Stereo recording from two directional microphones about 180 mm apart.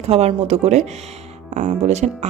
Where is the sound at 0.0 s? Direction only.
35° right (ahead or behind).